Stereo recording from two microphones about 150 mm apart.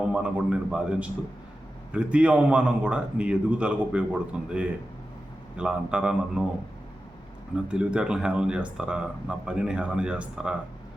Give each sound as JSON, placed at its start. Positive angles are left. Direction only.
{"t": 0.0, "sound": "speech", "side_deg": -5}
{"t": 7.5, "sound": "speech", "side_deg": -5}